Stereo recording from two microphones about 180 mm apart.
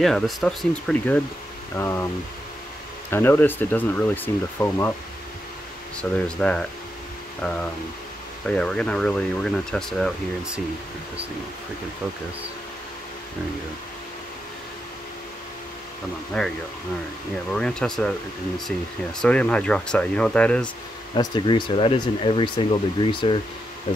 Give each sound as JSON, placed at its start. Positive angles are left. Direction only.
{"t": 0.0, "sound": "speech", "side_deg": 0}
{"t": 3.1, "sound": "speech", "side_deg": 10}
{"t": 5.9, "sound": "speech", "side_deg": 5}
{"t": 8.5, "sound": "speech", "side_deg": 5}
{"t": 16.3, "sound": "speech", "side_deg": 5}
{"t": 19.2, "sound": "speech", "side_deg": 5}
{"t": 21.1, "sound": "speech", "side_deg": 25}